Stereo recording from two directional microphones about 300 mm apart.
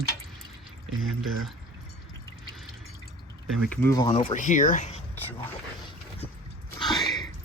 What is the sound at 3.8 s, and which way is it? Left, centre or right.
Speech, centre.